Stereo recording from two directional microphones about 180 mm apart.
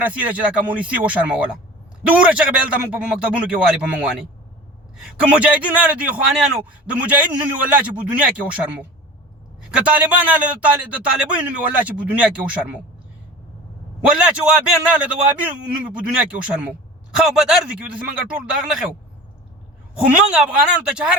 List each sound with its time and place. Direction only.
0.0 s a man's voice: 10° right (ahead or behind)
14.2 s a man's voice: 5° right (ahead or behind)
20.3 s speech: 5° right (ahead or behind)